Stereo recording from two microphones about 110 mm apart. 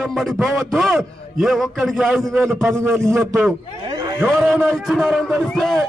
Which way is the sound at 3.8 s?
40° right (ahead or behind).